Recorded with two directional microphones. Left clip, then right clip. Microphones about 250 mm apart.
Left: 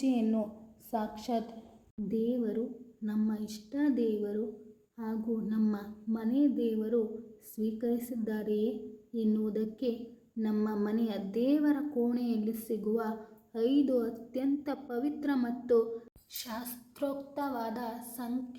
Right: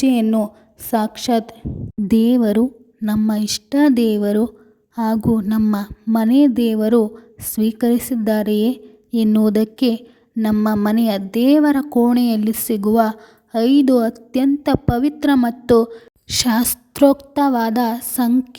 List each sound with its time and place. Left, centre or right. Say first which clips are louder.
0.0 s a woman's voice: right 14 dB; right